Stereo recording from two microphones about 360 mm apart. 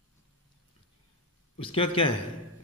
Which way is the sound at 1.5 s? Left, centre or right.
Centre.